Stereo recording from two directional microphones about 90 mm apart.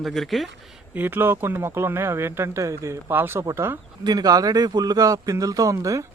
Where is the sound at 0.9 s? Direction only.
20° right (ahead or behind).